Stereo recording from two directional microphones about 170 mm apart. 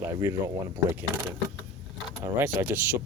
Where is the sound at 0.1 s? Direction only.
15° right (ahead or behind).